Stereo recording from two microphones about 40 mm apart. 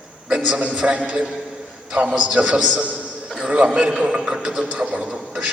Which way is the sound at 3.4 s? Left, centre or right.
Right.